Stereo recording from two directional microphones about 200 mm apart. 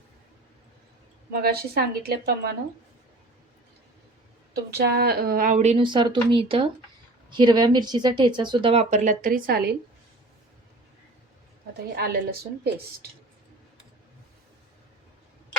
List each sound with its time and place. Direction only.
1.3 s a woman's voice: 50° right (ahead or behind)
4.5 s a woman's voice: 55° right (ahead or behind)
11.9 s a woman's voice: 50° right (ahead or behind)